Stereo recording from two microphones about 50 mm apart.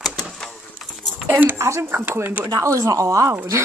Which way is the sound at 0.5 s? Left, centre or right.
Centre.